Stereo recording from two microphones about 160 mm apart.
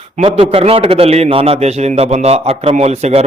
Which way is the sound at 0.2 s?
40° right (ahead or behind).